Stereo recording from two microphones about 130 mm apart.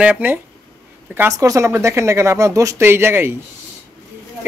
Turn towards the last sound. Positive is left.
turn(degrees=-20)  # may be behind; listen again after turning